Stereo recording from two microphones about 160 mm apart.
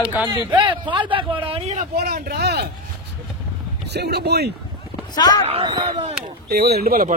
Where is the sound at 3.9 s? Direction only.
90° right.